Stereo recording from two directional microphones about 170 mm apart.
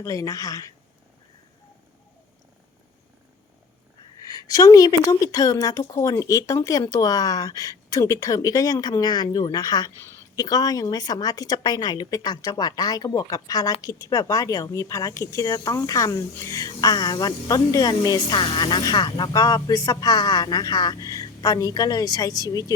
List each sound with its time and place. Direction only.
0.0 s speech: 20° left (ahead or behind)
4.3 s speech: 20° left (ahead or behind)